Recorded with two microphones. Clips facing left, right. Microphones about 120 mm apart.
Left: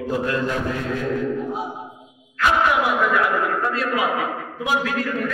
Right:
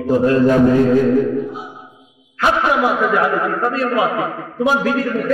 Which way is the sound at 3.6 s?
35° right (ahead or behind).